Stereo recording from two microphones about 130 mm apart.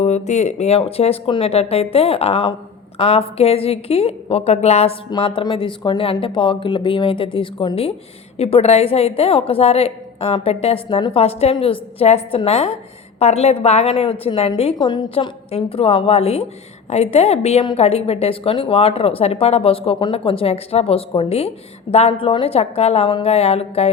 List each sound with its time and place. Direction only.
0.0 s speech: 60° left (ahead or behind)
5.2 s speech: 40° left (ahead or behind)
8.4 s speech: 50° left (ahead or behind)
14.8 s speech: 35° left (ahead or behind)
15.4 s a woman's voice: 50° left (ahead or behind)